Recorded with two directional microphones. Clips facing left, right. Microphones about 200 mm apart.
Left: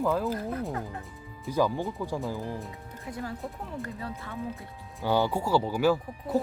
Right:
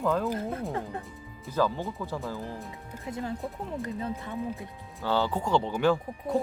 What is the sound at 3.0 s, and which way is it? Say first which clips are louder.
Speech: right 2 dB; 20° right (ahead or behind).